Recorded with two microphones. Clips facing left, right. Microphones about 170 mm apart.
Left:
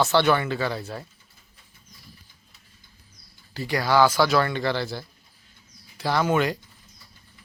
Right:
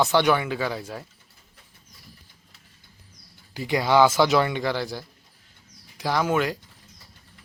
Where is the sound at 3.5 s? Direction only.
20° right (ahead or behind).